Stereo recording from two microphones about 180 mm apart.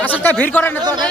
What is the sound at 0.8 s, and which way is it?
Speech, 20° right (ahead or behind).